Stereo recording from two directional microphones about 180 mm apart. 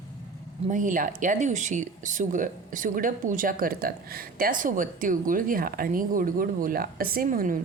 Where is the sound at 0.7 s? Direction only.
45° right (ahead or behind).